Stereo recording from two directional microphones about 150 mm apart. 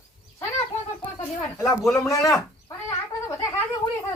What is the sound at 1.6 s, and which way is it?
Speech, centre (ahead or behind).